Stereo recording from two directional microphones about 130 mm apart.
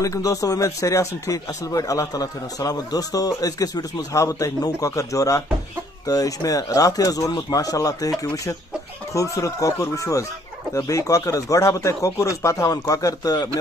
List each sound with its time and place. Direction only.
0.0 s speech: 25° left (ahead or behind)
9.1 s speech: 25° left (ahead or behind)